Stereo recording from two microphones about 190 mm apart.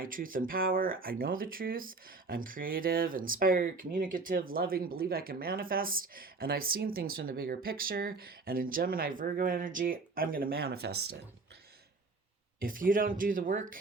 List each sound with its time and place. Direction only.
0.0 s speech: 45° right (ahead or behind)
12.5 s speech: 45° right (ahead or behind)